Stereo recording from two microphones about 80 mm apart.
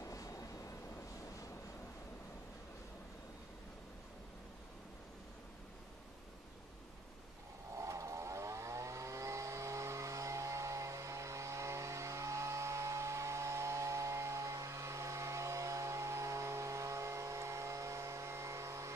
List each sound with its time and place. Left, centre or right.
0.0 s vehicle: left
7.7 s vehicle: right